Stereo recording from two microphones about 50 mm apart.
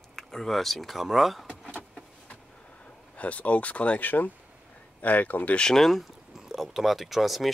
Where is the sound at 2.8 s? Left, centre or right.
Left.